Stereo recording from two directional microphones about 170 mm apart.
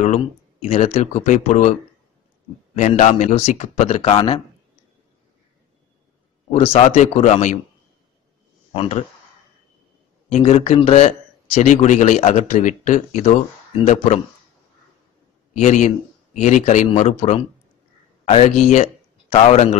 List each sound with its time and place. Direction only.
0.0 s speech: 40° left (ahead or behind)
6.5 s speech: 40° left (ahead or behind)
8.7 s speech: 35° left (ahead or behind)
10.3 s speech: 35° left (ahead or behind)
15.6 s speech: 45° left (ahead or behind)